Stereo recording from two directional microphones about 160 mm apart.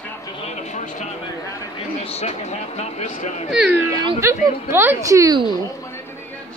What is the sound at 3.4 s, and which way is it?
Speech, centre (ahead or behind).